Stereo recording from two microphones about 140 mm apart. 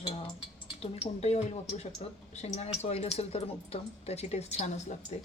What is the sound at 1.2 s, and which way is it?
A woman's voice, 50° left (ahead or behind).